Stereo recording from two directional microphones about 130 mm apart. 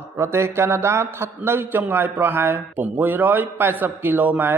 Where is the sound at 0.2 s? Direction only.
20° right (ahead or behind).